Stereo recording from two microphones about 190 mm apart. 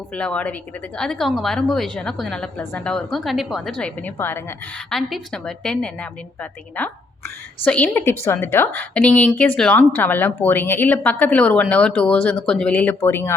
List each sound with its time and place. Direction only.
0.1 s a woman's voice: 5° left (ahead or behind)